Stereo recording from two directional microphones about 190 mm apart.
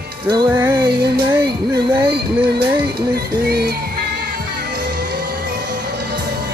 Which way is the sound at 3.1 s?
55° right (ahead or behind).